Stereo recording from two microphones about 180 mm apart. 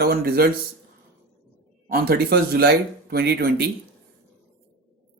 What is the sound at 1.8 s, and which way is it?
Speech, 55° right (ahead or behind).